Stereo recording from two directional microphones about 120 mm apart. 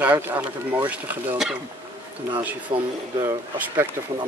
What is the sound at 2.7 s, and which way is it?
Speech, 40° right (ahead or behind).